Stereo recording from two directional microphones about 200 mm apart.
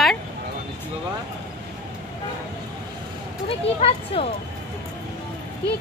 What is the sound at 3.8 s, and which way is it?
Speech, 30° left (ahead or behind).